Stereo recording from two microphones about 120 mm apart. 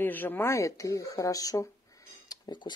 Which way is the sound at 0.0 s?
15° left (ahead or behind).